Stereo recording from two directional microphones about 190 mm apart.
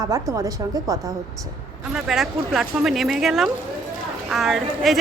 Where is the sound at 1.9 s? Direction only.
Centre (ahead or behind).